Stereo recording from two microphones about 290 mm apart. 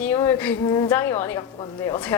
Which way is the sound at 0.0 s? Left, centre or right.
Centre.